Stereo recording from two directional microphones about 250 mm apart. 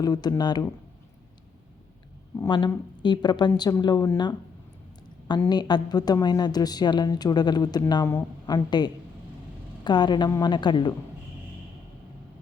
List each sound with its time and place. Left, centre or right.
0.0 s a woman's voice: centre
2.3 s a woman's voice: centre